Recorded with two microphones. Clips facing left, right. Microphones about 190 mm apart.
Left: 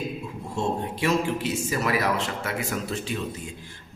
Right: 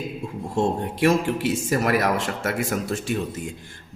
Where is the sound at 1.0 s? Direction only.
50° right (ahead or behind).